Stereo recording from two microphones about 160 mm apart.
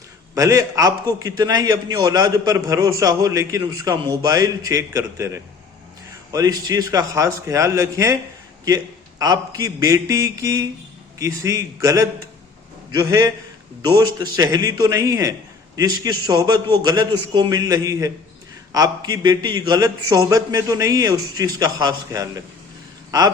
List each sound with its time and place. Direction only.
0.3 s a man's voice: 20° right (ahead or behind)